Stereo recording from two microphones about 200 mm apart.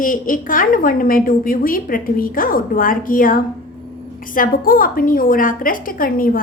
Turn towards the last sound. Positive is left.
turn(degrees=45)  # may be behind; listen again after turning